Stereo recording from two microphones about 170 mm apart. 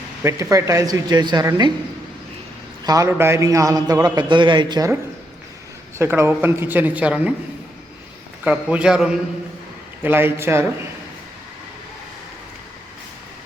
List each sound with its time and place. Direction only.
0.2 s a man's voice: 15° right (ahead or behind)
2.8 s a man's voice: 20° right (ahead or behind)
6.0 s speech: 15° right (ahead or behind)
8.4 s a man's voice: 5° right (ahead or behind)